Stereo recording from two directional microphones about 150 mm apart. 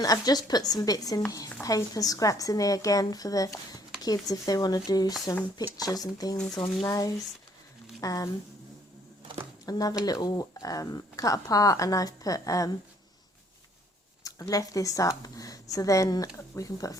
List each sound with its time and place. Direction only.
0.0 s a woman's voice: 25° left (ahead or behind)
9.6 s a woman's voice: 25° left (ahead or behind)
14.3 s a woman's voice: 25° left (ahead or behind)